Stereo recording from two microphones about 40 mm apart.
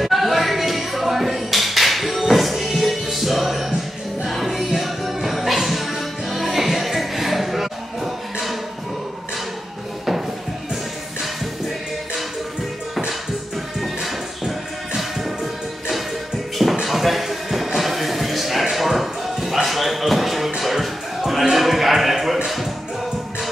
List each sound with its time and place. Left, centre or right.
0.0 s music: centre
16.8 s music: centre
17.7 s a sound: centre